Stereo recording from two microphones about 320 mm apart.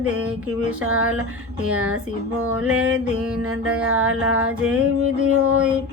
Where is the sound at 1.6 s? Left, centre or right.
Right.